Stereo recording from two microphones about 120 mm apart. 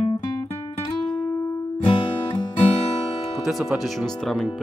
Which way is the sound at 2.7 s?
50° left (ahead or behind).